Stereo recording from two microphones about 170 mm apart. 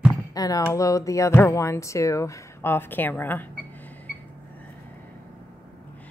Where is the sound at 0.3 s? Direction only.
20° left (ahead or behind).